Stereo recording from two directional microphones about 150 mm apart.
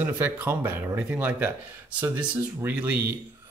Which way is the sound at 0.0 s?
15° right (ahead or behind).